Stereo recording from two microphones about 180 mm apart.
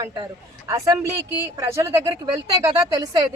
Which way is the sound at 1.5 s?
15° right (ahead or behind).